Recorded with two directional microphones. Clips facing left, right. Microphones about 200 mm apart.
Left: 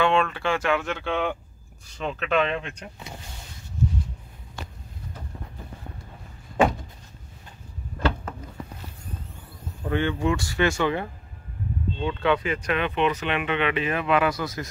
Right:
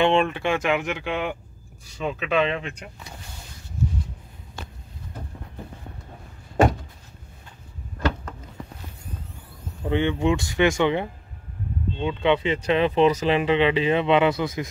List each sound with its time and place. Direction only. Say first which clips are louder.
0.0 s speech: right 2 dB; 20° right (ahead or behind)
9.8 s speech: right 2 dB; 20° right (ahead or behind)